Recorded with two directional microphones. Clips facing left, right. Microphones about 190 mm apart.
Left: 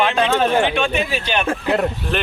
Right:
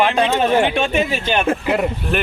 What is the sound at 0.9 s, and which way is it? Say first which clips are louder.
Speech: right 3 dB; 50° right (ahead or behind).